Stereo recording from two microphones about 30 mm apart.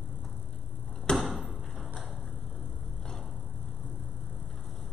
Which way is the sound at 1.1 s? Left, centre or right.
Left.